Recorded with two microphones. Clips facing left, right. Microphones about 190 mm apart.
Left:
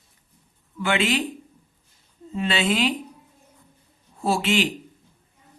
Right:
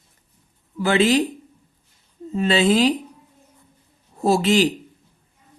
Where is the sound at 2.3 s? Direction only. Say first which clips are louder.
Right 6 dB; 40° right (ahead or behind).